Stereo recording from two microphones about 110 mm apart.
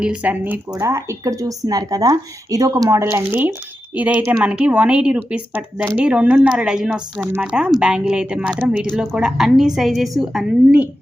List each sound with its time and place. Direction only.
0.0 s speech: 10° right (ahead or behind)
0.8 s a woman's voice: 25° right (ahead or behind); by 10.8 s 5° right (ahead or behind)